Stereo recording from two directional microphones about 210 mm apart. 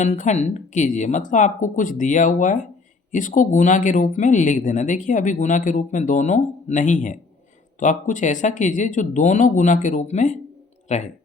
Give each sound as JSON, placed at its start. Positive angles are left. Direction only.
{"t": 0.0, "sound": "speech", "side_deg": 35}